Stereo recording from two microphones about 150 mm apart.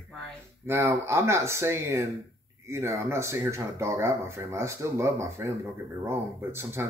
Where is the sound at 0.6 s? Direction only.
20° right (ahead or behind).